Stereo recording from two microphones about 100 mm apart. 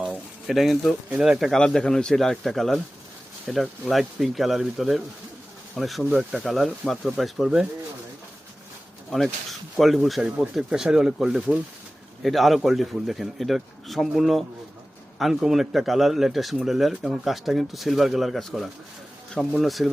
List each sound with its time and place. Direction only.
0.4 s speech: centre (ahead or behind)
9.0 s speech: 5° left (ahead or behind)